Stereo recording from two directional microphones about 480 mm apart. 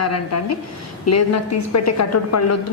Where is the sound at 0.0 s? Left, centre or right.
Left.